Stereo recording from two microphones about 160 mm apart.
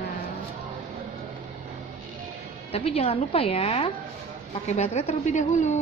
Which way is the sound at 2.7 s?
40° left (ahead or behind).